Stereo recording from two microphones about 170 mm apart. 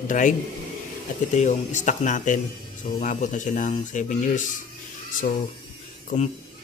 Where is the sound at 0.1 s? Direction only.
50° left (ahead or behind).